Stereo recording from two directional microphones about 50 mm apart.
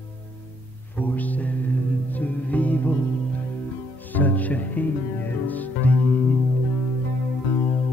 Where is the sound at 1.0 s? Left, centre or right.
Left.